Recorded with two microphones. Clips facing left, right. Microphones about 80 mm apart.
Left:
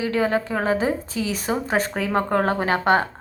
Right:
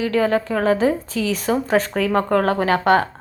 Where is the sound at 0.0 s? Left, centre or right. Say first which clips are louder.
Right 3 dB; left.